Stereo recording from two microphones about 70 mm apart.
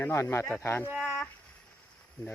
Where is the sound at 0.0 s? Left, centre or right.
Left.